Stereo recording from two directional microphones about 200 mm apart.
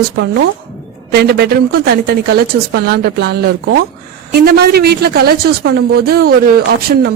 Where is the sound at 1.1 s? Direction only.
55° right (ahead or behind).